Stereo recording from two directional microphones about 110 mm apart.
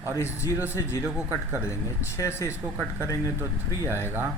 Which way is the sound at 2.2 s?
25° left (ahead or behind).